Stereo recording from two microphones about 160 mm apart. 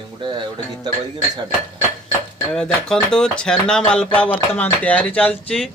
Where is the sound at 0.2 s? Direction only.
30° right (ahead or behind).